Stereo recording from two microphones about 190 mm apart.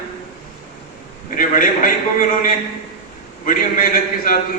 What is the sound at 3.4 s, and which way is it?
Speech, 45° left (ahead or behind).